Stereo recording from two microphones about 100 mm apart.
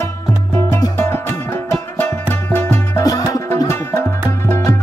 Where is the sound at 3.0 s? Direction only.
35° left (ahead or behind).